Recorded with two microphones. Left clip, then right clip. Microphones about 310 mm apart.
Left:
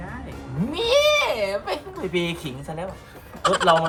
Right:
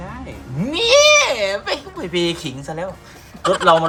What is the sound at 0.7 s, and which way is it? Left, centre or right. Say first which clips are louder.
Speech: right 7 dB; right.